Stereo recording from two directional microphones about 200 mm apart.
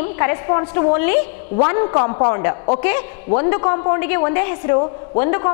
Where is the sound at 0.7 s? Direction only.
10° left (ahead or behind).